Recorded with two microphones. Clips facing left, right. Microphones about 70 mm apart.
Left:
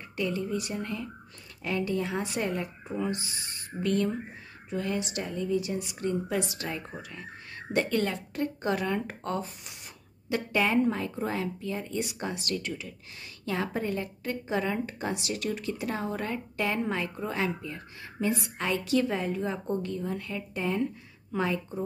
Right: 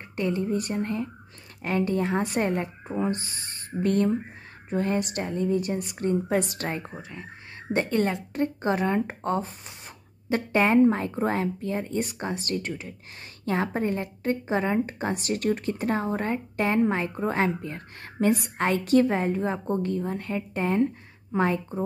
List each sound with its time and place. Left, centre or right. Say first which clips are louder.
0.1 s a woman's voice: right 4 dB; right
6.4 s a woman's voice: right 4 dB; right
7.0 s speech: right 2 dB; right
17.6 s a woman's voice: right 3 dB; right